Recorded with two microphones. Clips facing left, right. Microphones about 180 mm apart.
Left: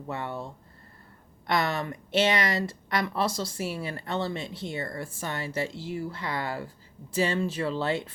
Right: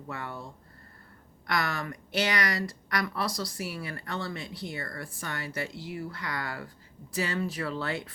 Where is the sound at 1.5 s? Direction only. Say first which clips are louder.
Left 4 dB; 25° left (ahead or behind).